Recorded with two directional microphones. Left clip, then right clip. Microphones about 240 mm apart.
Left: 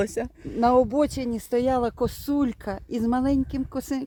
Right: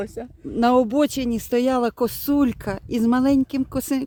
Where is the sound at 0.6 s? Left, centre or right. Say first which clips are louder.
Right 2 dB; right.